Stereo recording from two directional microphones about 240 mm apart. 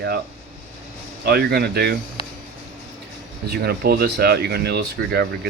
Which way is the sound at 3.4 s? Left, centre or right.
Right.